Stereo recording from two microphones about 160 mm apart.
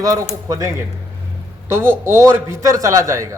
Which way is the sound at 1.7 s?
15° right (ahead or behind).